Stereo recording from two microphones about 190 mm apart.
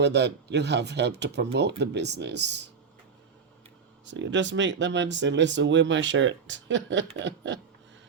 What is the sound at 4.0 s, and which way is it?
Speech, 75° right (ahead or behind).